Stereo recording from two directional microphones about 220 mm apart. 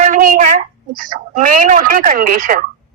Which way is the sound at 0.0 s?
40° right (ahead or behind).